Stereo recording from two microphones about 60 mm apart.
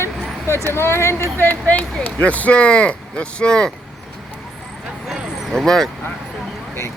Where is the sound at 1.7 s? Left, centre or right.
Left.